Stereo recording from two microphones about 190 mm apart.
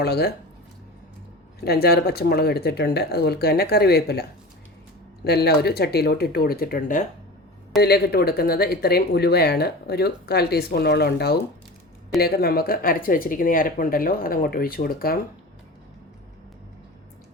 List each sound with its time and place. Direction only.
0.0 s speech: 55° left (ahead or behind)
1.6 s speech: 55° left (ahead or behind)
7.8 s speech: 55° left (ahead or behind)